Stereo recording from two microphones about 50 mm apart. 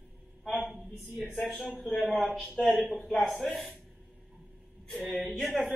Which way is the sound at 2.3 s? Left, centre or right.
Centre.